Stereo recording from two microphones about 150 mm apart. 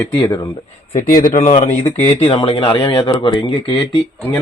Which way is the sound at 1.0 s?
60° left (ahead or behind).